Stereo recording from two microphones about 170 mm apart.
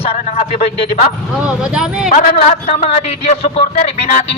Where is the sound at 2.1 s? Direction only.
45° left (ahead or behind).